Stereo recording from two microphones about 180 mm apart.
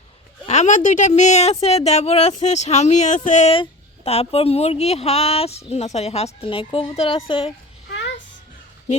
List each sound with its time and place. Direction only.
0.4 s a woman's voice: 40° left (ahead or behind)
7.9 s music: 75° left (ahead or behind)